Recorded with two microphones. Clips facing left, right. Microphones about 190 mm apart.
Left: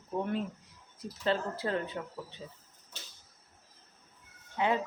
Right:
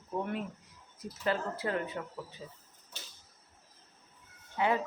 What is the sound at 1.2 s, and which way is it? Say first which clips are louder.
Speech: left 1 dB; 30° left (ahead or behind).